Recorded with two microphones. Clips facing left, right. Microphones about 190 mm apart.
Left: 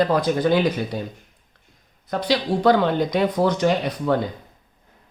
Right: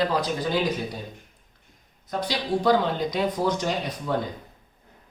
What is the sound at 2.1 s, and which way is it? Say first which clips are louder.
Speech: left 5 dB; 65° left (ahead or behind).